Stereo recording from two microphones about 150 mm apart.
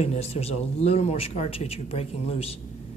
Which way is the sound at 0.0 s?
45° left (ahead or behind).